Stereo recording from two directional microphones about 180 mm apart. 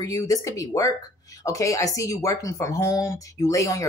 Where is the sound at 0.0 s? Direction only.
20° left (ahead or behind).